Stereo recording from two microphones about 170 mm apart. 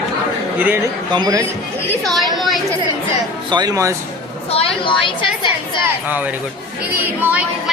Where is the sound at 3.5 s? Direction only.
25° right (ahead or behind).